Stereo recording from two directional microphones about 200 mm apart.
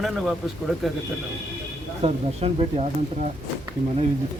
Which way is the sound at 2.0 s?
30° right (ahead or behind).